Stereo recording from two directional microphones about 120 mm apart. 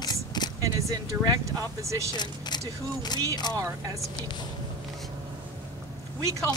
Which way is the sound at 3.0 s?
35° left (ahead or behind).